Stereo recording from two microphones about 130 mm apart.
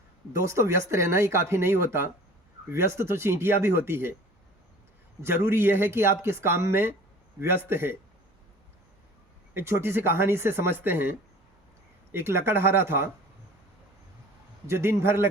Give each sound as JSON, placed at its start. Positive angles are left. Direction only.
{"t": 0.3, "sound": "speech", "side_deg": -20}
{"t": 5.2, "sound": "a man's voice", "side_deg": -20}
{"t": 9.6, "sound": "speech", "side_deg": -20}
{"t": 12.1, "sound": "speech", "side_deg": -20}
{"t": 14.7, "sound": "speech", "side_deg": -20}